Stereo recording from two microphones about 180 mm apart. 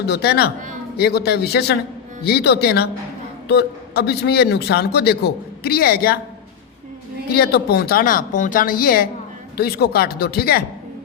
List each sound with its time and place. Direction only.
0.1 s a man's voice: 60° left (ahead or behind)
7.3 s a man's voice: 60° left (ahead or behind)